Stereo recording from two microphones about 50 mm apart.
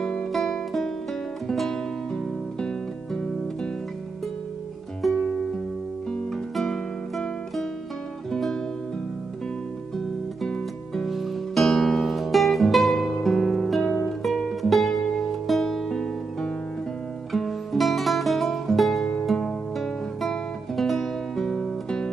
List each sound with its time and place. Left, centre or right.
0.0 s guitar: centre
1.5 s music: centre
2.6 s guitar: centre
5.0 s music: centre
6.5 s music: centre
9.9 s music: centre
11.1 s music: centre
17.3 s music: centre
20.7 s music: centre